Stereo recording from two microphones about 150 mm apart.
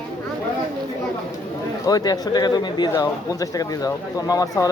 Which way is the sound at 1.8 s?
25° left (ahead or behind).